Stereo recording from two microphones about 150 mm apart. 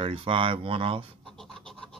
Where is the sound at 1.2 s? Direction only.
5° left (ahead or behind).